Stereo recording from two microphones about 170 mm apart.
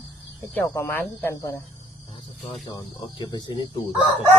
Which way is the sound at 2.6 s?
25° left (ahead or behind).